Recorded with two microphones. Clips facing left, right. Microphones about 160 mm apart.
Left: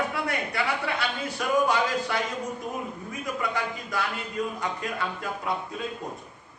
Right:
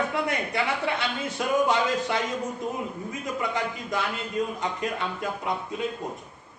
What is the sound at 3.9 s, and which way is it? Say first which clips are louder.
A man's voice: right 2 dB; 20° right (ahead or behind).